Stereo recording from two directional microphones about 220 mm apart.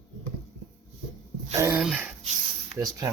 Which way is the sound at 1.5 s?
10° right (ahead or behind).